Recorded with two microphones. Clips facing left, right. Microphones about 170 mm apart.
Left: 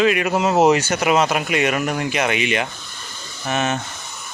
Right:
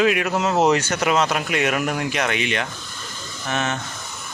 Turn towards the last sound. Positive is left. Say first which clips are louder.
# left 3 dB
turn(degrees=10)  # may be behind; listen again after turning